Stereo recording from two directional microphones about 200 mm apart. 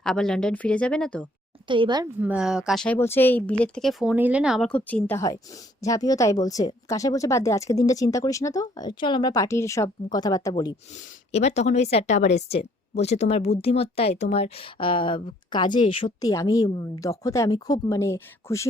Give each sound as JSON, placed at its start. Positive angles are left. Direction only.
{"t": 0.0, "sound": "speech", "side_deg": 5}
{"t": 1.6, "sound": "speech", "side_deg": -25}
{"t": 2.2, "sound": "speech", "side_deg": -5}
{"t": 11.3, "sound": "a woman's voice", "side_deg": 35}